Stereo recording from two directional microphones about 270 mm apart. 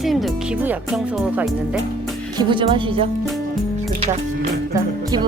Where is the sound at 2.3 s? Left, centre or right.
Centre.